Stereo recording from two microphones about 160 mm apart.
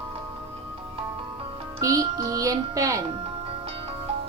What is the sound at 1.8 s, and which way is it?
Speech, 20° right (ahead or behind).